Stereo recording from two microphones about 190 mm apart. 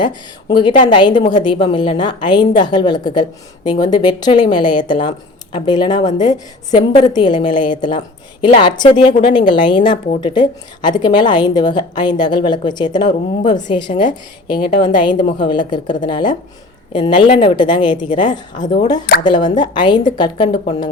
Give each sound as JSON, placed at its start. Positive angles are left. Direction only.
{"t": 0.0, "sound": "a woman's voice", "side_deg": 25}